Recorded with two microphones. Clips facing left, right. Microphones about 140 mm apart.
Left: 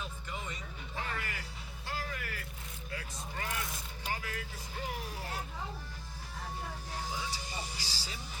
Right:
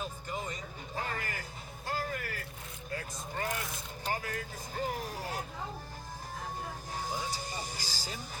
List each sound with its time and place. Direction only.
0.0 s music: 40° right (ahead or behind)
2.9 s vehicle: 45° right (ahead or behind)
4.0 s music: 45° right (ahead or behind)
7.0 s music: 45° right (ahead or behind)